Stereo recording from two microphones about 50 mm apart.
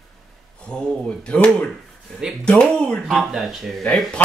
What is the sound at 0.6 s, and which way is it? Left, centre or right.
Speech, centre.